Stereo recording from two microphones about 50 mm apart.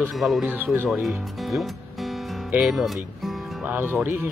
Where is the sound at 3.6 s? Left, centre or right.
Right.